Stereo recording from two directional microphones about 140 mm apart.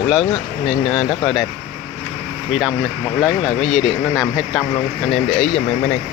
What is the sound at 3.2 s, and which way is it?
Speech, centre (ahead or behind).